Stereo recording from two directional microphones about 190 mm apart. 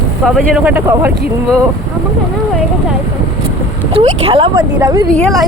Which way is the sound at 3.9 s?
30° right (ahead or behind).